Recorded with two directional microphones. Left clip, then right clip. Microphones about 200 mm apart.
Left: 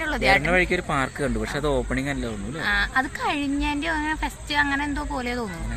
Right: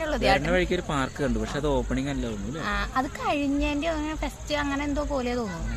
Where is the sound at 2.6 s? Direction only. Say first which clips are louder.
Left 6 dB; 30° right (ahead or behind).